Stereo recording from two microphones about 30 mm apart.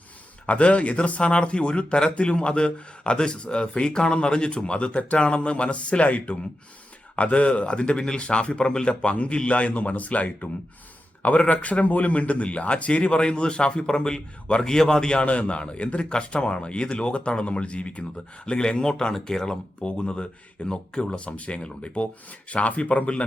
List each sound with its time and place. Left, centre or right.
0.4 s a man's voice: left
11.4 s a man's voice: left
14.6 s speech: left
15.2 s speech: left
18.4 s speech: left
19.8 s speech: left
21.1 s a man's voice: left